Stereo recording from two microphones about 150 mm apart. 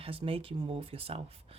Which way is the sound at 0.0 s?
40° right (ahead or behind).